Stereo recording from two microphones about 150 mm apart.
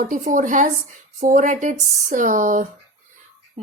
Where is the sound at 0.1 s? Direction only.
60° right (ahead or behind).